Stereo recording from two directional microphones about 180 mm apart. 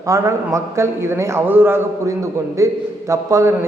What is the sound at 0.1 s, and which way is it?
A man's voice, 15° right (ahead or behind).